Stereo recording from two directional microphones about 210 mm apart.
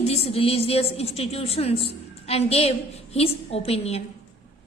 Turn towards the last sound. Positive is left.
turn(degrees=30)  # may be behind; listen again after turning